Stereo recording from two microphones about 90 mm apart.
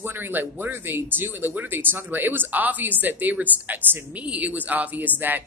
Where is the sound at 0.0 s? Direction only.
20° right (ahead or behind).